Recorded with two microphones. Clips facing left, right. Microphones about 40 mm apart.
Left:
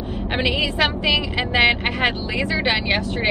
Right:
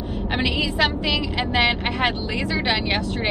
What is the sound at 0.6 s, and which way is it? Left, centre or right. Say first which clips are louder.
Speech: left 1 dB; left.